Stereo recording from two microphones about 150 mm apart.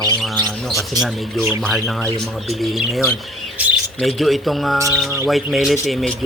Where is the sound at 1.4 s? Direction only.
15° right (ahead or behind).